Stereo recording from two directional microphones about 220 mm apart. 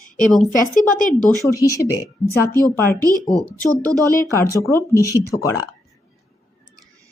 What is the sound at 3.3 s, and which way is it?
Speech, centre (ahead or behind).